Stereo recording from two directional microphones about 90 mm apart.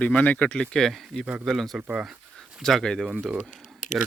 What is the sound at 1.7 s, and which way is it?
Speech, 10° right (ahead or behind).